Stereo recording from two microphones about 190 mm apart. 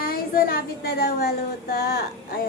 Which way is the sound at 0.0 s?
50° left (ahead or behind).